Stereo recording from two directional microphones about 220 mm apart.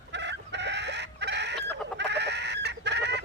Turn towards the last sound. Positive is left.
turn(degrees=-50)  # may be behind; listen again after turning